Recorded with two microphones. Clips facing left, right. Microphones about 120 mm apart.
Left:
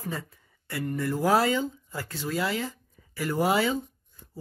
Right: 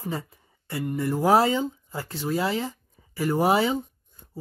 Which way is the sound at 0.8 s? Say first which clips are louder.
Right 3 dB; 20° right (ahead or behind).